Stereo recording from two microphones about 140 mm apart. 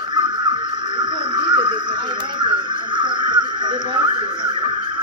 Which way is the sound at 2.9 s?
30° right (ahead or behind).